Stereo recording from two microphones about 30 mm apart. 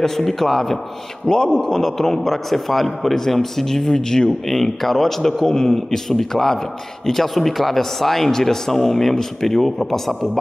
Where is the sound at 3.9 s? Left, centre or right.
Left.